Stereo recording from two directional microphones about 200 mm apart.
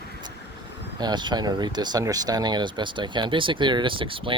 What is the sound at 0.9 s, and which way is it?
Speech, 20° right (ahead or behind).